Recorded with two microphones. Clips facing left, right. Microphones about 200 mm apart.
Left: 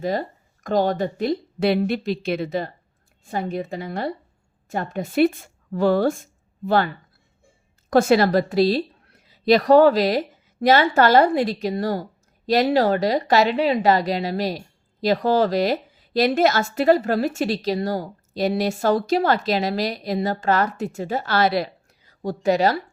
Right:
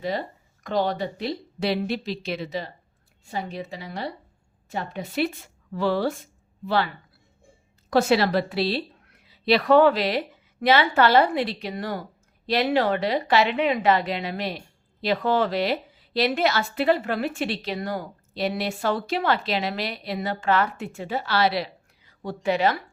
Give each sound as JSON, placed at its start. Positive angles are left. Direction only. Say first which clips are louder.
{"t": 0.0, "sound": "speech", "louder": "left 4 dB", "side_deg": 45}